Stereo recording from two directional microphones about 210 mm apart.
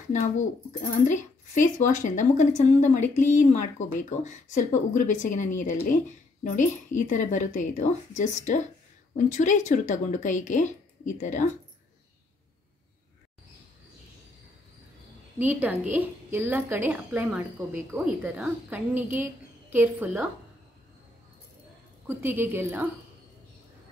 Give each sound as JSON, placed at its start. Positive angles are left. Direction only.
{"t": 0.1, "sound": "a woman's voice", "side_deg": 35}
{"t": 15.3, "sound": "a woman's voice", "side_deg": -10}
{"t": 22.0, "sound": "a woman's voice", "side_deg": -10}